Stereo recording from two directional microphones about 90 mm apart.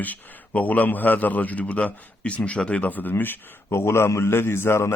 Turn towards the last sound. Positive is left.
turn(degrees=30)  # may be behind; listen again after turning